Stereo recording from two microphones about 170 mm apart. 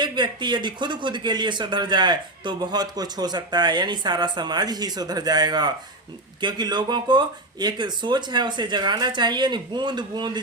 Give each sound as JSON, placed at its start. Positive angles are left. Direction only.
{"t": 0.0, "sound": "speech", "side_deg": -25}